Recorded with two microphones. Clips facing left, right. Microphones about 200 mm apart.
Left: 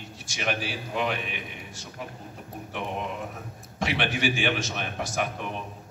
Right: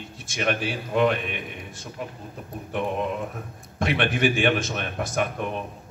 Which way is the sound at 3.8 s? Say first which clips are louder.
Right 4 dB; 55° right (ahead or behind).